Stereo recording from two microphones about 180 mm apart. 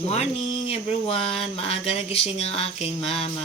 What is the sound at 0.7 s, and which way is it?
Mantra, 30° left (ahead or behind).